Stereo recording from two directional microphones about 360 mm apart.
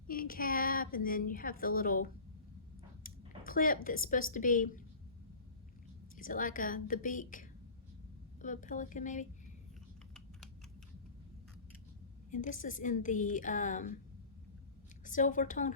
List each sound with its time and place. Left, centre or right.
0.1 s a woman's voice: left
6.1 s a woman's voice: left
12.3 s a woman's voice: left
15.0 s a woman's voice: left